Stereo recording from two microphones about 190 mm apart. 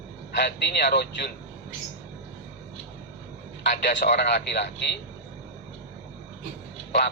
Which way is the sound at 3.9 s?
60° left (ahead or behind).